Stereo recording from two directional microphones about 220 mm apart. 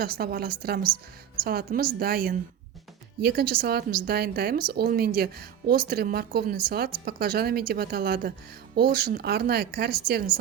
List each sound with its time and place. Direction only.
0.0 s a woman's voice: 45° right (ahead or behind)